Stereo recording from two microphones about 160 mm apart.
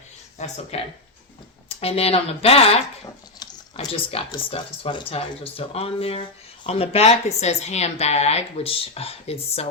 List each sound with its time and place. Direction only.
0.3 s speech: 45° left (ahead or behind)
1.8 s speech: 40° left (ahead or behind)
4.3 s speech: 35° left (ahead or behind)